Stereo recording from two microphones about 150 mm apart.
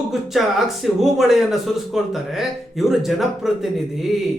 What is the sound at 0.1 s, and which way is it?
A man's voice, centre (ahead or behind).